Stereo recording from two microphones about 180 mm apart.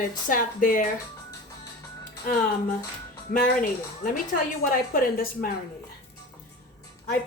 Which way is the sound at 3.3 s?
50° left (ahead or behind).